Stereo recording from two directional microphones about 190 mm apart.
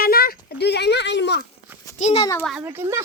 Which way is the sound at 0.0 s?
55° left (ahead or behind).